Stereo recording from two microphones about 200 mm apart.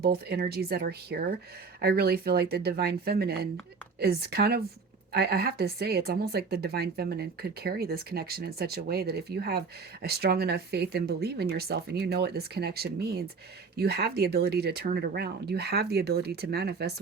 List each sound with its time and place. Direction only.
0.0 s a woman's voice: 50° right (ahead or behind)